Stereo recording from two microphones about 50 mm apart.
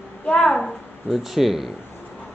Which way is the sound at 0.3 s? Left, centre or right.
Centre.